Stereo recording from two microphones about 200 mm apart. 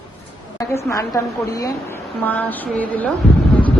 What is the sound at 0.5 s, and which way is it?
A woman's voice, 15° left (ahead or behind).